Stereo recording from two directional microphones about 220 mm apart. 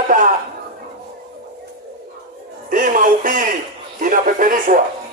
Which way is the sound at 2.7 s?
40° right (ahead or behind).